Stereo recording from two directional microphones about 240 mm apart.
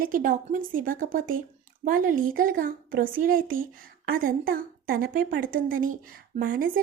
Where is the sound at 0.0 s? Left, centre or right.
Right.